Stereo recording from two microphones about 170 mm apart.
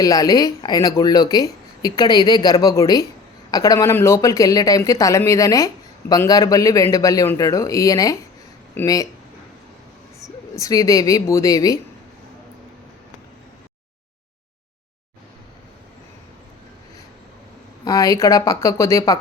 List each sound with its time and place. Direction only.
0.0 s speech: 20° left (ahead or behind)
10.5 s speech: 20° left (ahead or behind)
17.8 s speech: 20° left (ahead or behind)